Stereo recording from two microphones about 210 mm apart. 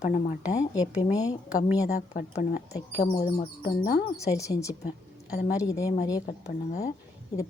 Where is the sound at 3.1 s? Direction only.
20° left (ahead or behind).